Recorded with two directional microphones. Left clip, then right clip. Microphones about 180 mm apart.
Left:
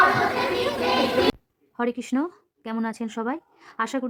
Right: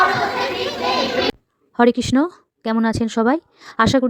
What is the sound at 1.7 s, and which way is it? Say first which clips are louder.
A woman's voice: right 11 dB; 35° right (ahead or behind).